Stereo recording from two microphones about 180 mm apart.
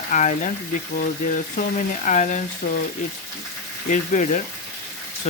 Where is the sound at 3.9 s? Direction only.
45° left (ahead or behind).